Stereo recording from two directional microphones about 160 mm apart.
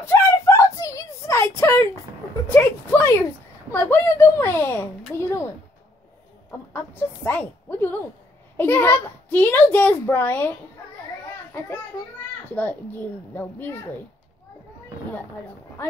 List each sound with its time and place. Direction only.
0.0 s a sound: 15° left (ahead or behind)
2.4 s a woman's voice: 15° left (ahead or behind)
7.2 s a woman's voice: 10° left (ahead or behind)
12.5 s a woman's voice: 10° left (ahead or behind)